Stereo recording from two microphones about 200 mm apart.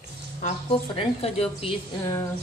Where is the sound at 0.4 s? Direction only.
30° left (ahead or behind).